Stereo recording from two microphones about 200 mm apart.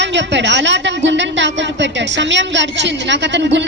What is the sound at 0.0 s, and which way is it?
A woman's voice, 60° right (ahead or behind).